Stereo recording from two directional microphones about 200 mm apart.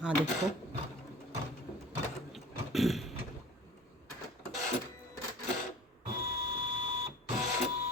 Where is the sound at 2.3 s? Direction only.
Centre (ahead or behind).